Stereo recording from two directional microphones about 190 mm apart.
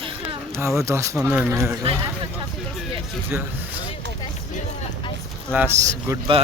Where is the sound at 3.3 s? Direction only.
10° right (ahead or behind).